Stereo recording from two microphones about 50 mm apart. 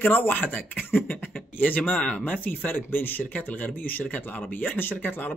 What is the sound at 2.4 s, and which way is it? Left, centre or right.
Speech, left.